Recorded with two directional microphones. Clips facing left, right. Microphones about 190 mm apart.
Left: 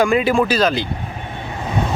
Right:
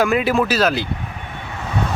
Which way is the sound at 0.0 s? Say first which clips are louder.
Left 2 dB; 5° right (ahead or behind).